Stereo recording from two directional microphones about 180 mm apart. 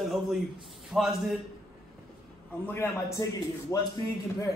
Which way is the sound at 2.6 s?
15° left (ahead or behind).